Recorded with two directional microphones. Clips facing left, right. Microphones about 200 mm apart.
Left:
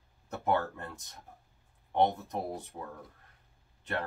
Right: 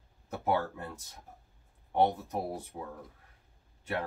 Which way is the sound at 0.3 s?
10° right (ahead or behind).